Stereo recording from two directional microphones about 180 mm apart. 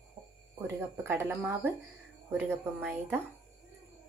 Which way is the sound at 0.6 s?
15° right (ahead or behind).